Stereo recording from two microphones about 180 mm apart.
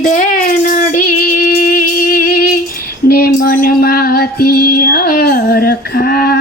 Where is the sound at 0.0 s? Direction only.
45° left (ahead or behind).